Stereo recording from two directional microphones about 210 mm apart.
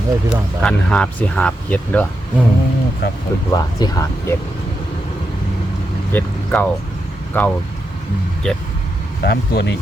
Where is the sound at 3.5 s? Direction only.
15° left (ahead or behind).